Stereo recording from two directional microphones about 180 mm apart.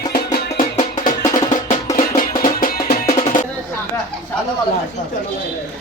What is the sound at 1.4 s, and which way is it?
Music, 40° left (ahead or behind).